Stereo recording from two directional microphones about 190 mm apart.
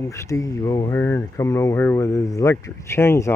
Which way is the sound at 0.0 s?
15° left (ahead or behind).